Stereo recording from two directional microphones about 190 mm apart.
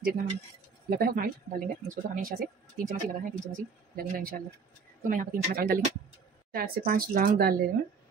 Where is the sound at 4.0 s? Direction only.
50° right (ahead or behind).